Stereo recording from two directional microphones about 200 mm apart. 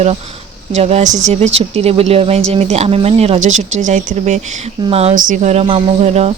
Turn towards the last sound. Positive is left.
turn(degrees=-30)  # may be behind; listen again after turning